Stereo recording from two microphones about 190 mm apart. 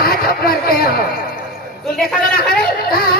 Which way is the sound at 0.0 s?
50° left (ahead or behind).